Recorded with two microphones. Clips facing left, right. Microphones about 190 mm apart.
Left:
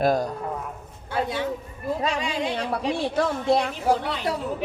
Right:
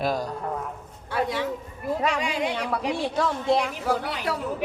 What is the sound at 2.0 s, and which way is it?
Speech, 25° left (ahead or behind).